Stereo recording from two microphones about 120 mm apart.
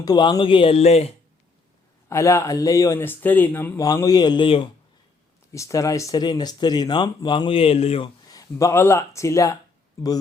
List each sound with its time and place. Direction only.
0.0 s speech: 35° left (ahead or behind); by 1.1 s 60° left (ahead or behind)
2.0 s speech: 25° left (ahead or behind)
4.0 s speech: 35° left (ahead or behind)
5.5 s speech: 25° left (ahead or behind); by 8.1 s 55° left (ahead or behind)
8.2 s speech: 30° left (ahead or behind)